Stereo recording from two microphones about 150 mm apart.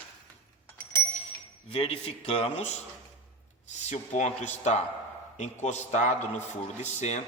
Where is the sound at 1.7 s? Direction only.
40° left (ahead or behind).